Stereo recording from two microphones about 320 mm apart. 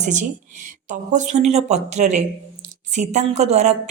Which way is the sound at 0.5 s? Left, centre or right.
Right.